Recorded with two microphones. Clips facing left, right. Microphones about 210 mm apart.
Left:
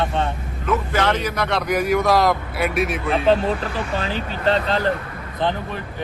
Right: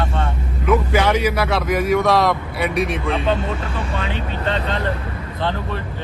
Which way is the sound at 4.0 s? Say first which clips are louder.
Even; 35° left (ahead or behind).